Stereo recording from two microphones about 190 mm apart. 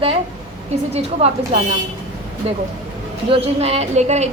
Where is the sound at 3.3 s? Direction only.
35° right (ahead or behind).